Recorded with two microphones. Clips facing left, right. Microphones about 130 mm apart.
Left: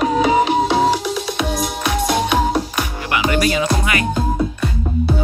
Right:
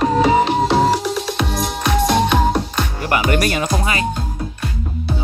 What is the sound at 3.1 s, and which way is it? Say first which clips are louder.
Music: even; 45° right (ahead or behind).